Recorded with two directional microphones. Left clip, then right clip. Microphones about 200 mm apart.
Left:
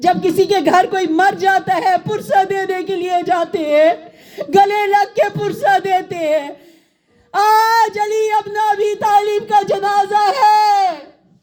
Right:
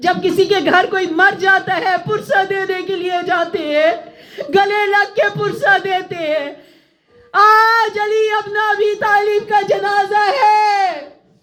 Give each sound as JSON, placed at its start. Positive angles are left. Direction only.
{"t": 0.0, "sound": "speech", "side_deg": 30}